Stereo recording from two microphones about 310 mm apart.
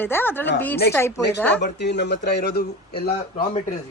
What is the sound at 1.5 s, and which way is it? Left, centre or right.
Speech, left.